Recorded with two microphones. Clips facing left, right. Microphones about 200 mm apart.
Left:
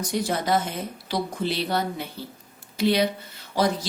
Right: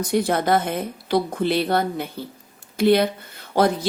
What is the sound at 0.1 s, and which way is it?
A woman's voice, 55° right (ahead or behind).